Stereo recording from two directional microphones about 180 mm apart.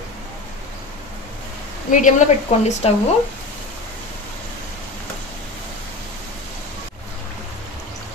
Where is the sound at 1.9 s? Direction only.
45° left (ahead or behind).